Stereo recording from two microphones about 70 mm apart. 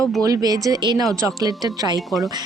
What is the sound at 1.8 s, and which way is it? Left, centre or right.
Speech, right.